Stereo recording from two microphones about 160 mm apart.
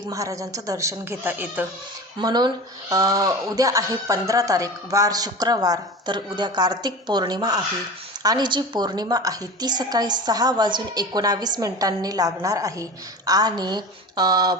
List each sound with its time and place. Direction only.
0.1 s a woman's voice: 20° right (ahead or behind)
2.1 s a woman's voice: 25° right (ahead or behind)